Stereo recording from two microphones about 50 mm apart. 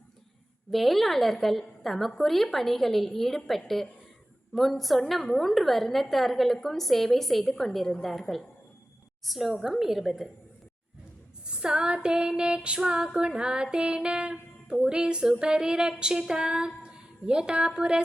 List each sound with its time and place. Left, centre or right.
0.7 s a woman's voice: centre
11.4 s music: centre